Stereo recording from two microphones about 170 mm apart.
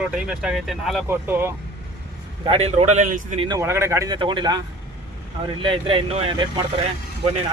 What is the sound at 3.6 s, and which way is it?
Speech, 15° right (ahead or behind).